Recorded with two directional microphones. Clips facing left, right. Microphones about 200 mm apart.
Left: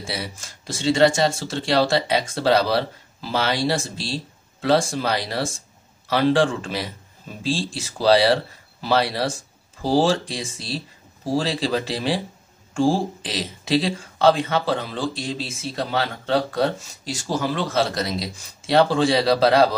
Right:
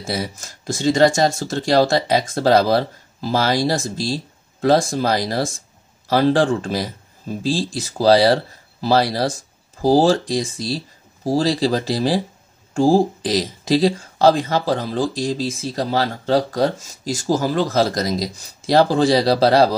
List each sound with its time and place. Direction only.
0.0 s speech: 45° right (ahead or behind)